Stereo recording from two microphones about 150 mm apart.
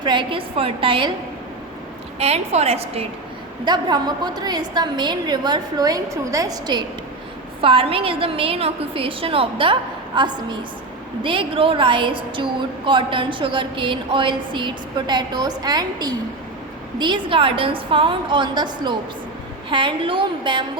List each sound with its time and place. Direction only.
0.0 s a woman's voice: 30° right (ahead or behind)
2.1 s a woman's voice: 45° right (ahead or behind)
3.6 s a woman's voice: 30° right (ahead or behind)
7.6 s a woman's voice: 35° right (ahead or behind)